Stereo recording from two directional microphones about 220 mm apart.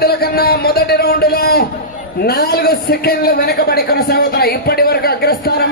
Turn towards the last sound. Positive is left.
turn(degrees=45)  # may be behind; listen again after turning